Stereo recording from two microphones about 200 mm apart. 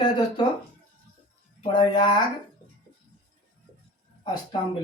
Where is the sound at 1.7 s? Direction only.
25° left (ahead or behind).